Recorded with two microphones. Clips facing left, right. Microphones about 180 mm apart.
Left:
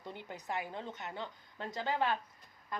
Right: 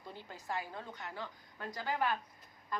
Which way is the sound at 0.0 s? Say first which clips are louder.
Left 3 dB; 20° left (ahead or behind).